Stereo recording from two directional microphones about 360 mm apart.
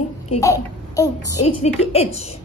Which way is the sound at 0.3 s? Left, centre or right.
Centre.